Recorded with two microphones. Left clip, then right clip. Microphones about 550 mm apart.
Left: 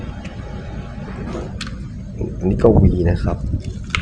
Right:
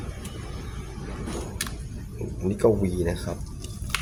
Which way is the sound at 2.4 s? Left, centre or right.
Right.